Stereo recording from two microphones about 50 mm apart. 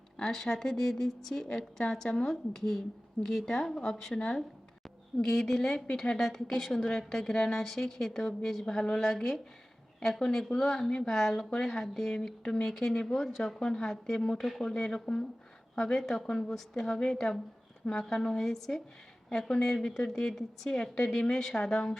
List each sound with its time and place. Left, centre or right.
0.2 s a woman's voice: centre
5.7 s speech: centre
6.1 s speech: centre
8.3 s a woman's voice: left